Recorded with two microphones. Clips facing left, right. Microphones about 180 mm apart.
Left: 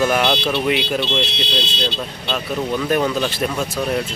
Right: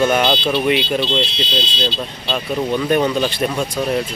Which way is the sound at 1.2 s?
65° left (ahead or behind).